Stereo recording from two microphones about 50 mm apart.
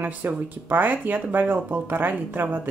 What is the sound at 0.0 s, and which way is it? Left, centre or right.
Speech, right.